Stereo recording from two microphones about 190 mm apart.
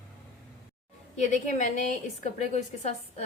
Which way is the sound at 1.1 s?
40° left (ahead or behind).